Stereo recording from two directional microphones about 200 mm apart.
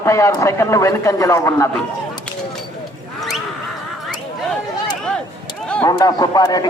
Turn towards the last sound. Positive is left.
turn(degrees=20)  # may be behind; listen again after turning